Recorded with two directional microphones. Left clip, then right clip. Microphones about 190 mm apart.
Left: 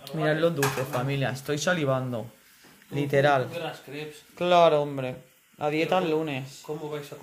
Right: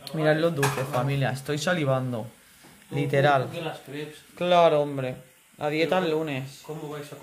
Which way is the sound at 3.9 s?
40° left (ahead or behind).